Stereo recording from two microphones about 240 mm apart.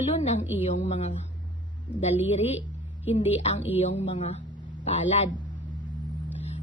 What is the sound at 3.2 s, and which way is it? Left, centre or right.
Speech, left.